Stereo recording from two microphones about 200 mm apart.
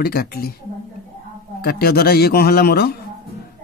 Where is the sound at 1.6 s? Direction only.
50° left (ahead or behind).